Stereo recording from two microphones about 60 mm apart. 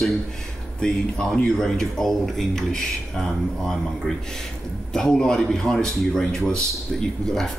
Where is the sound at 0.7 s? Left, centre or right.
Centre.